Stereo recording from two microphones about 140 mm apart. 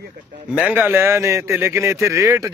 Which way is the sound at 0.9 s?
20° right (ahead or behind).